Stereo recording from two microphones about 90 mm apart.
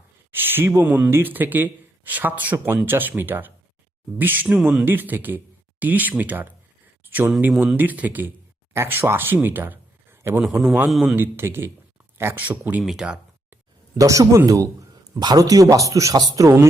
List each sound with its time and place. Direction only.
0.3 s a sound: 25° right (ahead or behind)
0.9 s speech: 15° right (ahead or behind)
4.4 s speech: 10° right (ahead or behind)
4.9 s speech: 20° right (ahead or behind)
7.0 s a sound: 20° right (ahead or behind)
7.6 s speech: 20° right (ahead or behind)
10.4 s speech: 5° right (ahead or behind)
11.1 s speech: 25° right (ahead or behind)
12.8 s speech: 5° right (ahead or behind)
13.9 s speech: 40° right (ahead or behind)
15.1 s speech: 45° right (ahead or behind)